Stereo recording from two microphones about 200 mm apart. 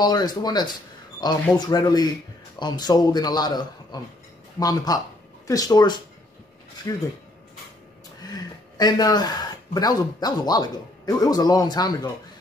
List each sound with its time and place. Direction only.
0.0 s speech: 20° left (ahead or behind)
8.7 s speech: 20° left (ahead or behind)